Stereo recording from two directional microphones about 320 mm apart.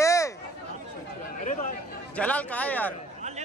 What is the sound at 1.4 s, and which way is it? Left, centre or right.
Speech, left.